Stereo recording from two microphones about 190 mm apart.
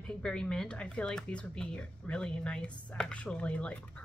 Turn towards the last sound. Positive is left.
turn(degrees=5)  # may be behind; listen again after turning